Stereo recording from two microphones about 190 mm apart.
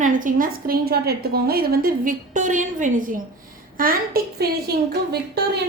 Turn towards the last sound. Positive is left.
turn(degrees=-55)  # may be behind; listen again after turning